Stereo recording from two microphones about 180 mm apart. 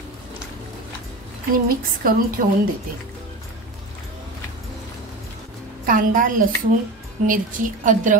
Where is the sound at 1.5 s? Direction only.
50° right (ahead or behind).